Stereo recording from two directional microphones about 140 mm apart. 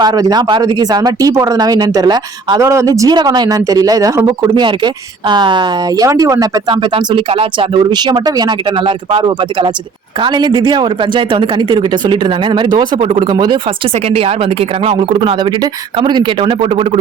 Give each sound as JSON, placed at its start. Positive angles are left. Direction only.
{"t": 0.0, "sound": "speech", "side_deg": -30}
{"t": 6.1, "sound": "speech", "side_deg": -25}
{"t": 6.9, "sound": "speech", "side_deg": -40}
{"t": 14.1, "sound": "speech", "side_deg": -45}
{"t": 15.2, "sound": "speech", "side_deg": -35}